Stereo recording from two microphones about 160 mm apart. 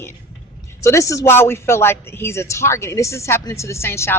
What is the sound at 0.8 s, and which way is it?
A woman's voice, 20° left (ahead or behind).